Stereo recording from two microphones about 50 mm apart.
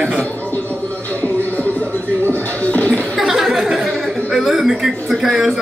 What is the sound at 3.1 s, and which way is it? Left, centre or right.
Chuckle, centre.